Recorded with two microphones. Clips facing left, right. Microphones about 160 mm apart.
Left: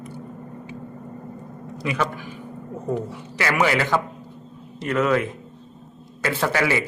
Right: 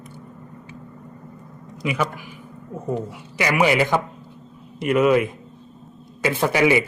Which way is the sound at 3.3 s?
15° right (ahead or behind).